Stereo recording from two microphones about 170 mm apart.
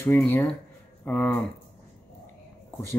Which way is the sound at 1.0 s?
10° left (ahead or behind).